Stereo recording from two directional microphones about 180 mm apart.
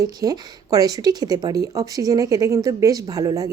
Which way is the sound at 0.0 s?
20° right (ahead or behind).